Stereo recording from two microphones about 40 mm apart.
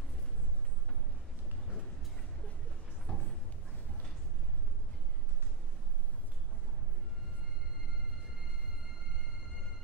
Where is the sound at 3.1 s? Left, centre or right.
Centre.